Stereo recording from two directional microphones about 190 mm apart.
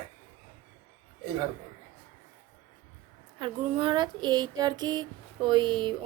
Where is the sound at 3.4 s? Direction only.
25° right (ahead or behind).